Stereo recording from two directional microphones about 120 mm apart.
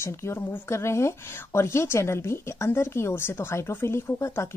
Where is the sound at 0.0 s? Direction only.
25° left (ahead or behind).